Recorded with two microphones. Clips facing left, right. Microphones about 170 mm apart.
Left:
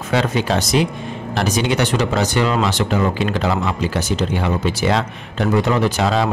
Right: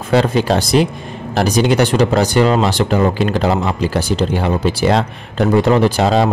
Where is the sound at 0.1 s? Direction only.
35° right (ahead or behind).